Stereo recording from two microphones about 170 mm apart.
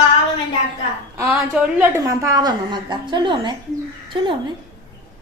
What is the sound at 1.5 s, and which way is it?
A woman's voice, 15° right (ahead or behind).